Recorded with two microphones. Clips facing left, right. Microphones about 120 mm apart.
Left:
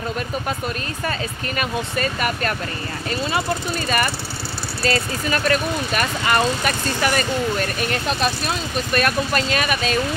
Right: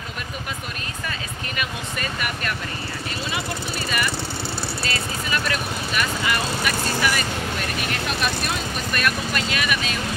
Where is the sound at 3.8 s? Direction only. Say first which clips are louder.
Left 3 dB; 45° left (ahead or behind).